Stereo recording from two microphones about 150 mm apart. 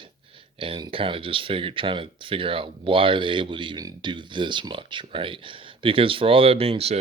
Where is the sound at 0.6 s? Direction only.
35° right (ahead or behind).